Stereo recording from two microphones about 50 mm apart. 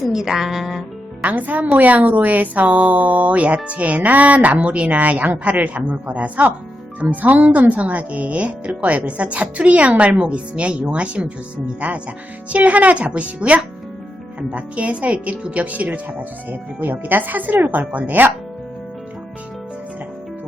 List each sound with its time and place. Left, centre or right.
0.0 s speech: centre
1.2 s speech: right